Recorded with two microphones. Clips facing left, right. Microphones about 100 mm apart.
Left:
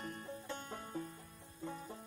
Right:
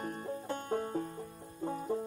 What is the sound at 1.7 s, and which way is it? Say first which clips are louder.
Banjo: right 12 dB; 45° right (ahead or behind).